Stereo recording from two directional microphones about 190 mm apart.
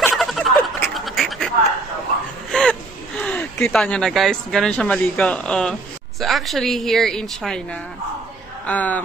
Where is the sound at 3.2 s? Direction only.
10° left (ahead or behind).